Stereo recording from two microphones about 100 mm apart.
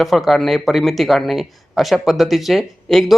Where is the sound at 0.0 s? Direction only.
Centre (ahead or behind).